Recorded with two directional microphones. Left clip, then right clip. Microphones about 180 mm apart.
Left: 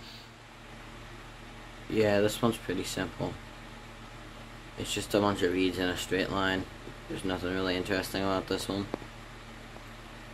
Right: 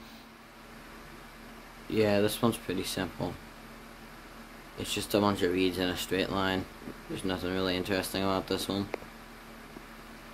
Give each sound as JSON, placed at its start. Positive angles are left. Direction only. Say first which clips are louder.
{"t": 2.0, "sound": "speech", "louder": "left 1 dB", "side_deg": 0}
{"t": 4.7, "sound": "speech", "louder": "even", "side_deg": 0}